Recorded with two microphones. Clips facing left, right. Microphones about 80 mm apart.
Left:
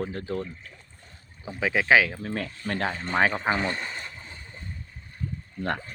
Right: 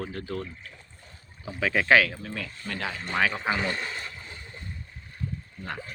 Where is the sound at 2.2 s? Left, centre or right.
Left.